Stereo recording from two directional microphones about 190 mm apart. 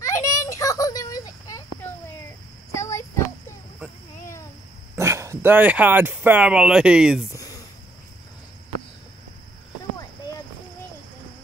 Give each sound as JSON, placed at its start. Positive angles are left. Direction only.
{"t": 0.0, "sound": "children playing", "side_deg": 15}
{"t": 2.7, "sound": "child singing", "side_deg": 15}
{"t": 4.9, "sound": "speech", "side_deg": -15}
{"t": 7.3, "sound": "a sound", "side_deg": 20}